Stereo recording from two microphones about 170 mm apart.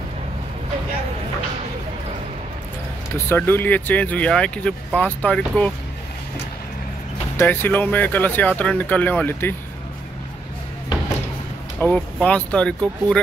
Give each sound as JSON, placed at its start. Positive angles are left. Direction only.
{"t": 3.3, "sound": "speech", "side_deg": 10}
{"t": 7.3, "sound": "speech", "side_deg": 10}
{"t": 11.8, "sound": "speech", "side_deg": 5}